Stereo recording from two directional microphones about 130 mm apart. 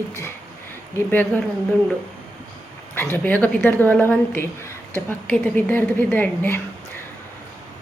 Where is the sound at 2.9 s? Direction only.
15° left (ahead or behind).